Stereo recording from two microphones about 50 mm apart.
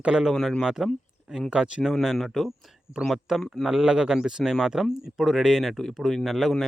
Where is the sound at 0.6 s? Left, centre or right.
Centre.